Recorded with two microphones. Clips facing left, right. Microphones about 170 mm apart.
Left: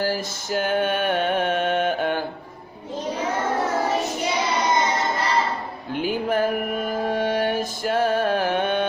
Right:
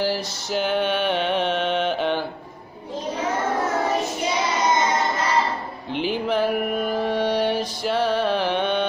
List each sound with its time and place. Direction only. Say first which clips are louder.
0.0 s mantra: right 1 dB; 50° left (ahead or behind)
5.9 s music: even; 45° left (ahead or behind)